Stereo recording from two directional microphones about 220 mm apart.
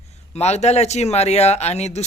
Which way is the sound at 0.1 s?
30° left (ahead or behind).